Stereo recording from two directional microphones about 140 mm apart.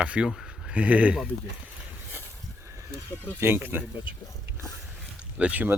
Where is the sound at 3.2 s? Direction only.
15° right (ahead or behind).